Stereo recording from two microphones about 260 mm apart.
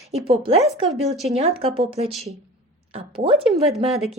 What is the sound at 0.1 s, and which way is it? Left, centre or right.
Speech, right.